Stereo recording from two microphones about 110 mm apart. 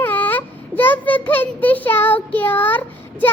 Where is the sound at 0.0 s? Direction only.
15° left (ahead or behind).